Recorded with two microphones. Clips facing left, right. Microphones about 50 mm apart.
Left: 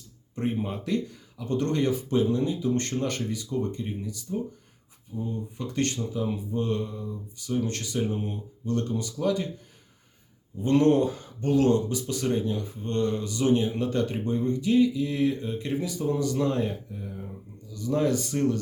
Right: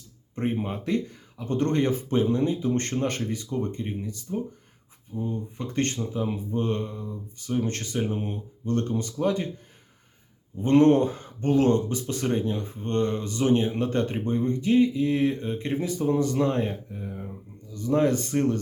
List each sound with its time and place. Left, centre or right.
0.3 s speech: right
10.6 s speech: right